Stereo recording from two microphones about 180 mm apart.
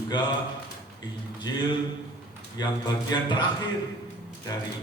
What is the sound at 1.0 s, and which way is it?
A man's voice, 25° left (ahead or behind).